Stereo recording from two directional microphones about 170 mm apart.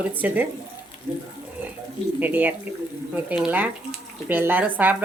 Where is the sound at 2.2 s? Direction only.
10° right (ahead or behind).